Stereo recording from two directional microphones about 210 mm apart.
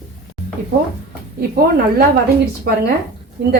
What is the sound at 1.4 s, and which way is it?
Speech, 45° right (ahead or behind).